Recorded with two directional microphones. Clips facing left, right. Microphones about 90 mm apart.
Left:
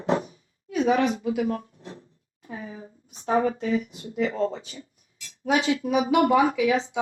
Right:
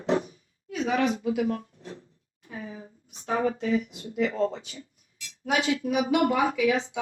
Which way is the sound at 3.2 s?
30° left (ahead or behind).